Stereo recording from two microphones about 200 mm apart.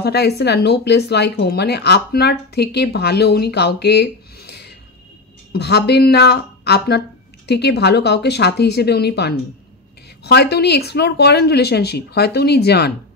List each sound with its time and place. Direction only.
0.0 s speech: 55° left (ahead or behind)